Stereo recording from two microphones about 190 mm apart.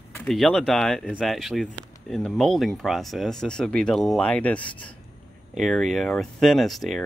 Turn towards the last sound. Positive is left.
turn(degrees=0)  # may be behind; listen again after turning